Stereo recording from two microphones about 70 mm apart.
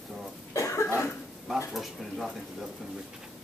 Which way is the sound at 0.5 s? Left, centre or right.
Left.